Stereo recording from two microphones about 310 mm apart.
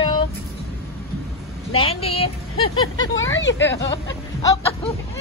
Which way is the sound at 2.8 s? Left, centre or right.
Left.